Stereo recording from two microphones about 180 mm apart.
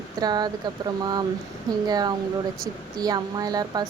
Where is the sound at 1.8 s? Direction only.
20° right (ahead or behind).